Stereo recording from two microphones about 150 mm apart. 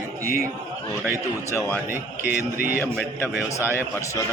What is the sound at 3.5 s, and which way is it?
Speech, 20° left (ahead or behind).